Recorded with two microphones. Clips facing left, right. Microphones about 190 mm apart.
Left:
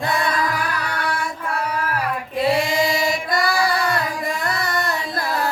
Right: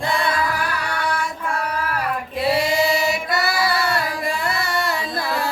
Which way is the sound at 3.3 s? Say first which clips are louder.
Left 1 dB; 5° right (ahead or behind).